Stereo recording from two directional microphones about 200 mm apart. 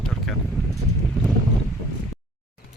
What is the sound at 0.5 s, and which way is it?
Clip-clop, centre (ahead or behind).